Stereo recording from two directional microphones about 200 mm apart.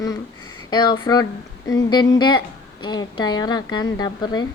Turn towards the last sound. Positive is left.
turn(degrees=20)  # may be behind; listen again after turning